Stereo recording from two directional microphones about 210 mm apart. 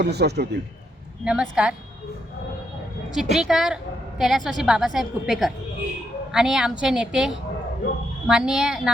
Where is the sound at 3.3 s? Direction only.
Centre (ahead or behind).